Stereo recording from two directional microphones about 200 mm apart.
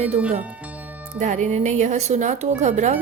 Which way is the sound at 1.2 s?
40° right (ahead or behind).